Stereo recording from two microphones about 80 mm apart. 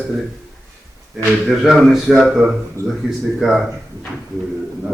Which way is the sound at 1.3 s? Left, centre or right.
Centre.